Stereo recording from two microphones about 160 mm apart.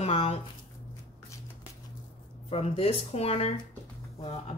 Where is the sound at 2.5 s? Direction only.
35° left (ahead or behind).